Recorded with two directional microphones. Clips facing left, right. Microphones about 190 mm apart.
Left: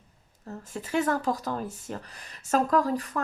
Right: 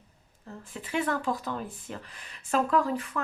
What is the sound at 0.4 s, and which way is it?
Speech, 40° left (ahead or behind).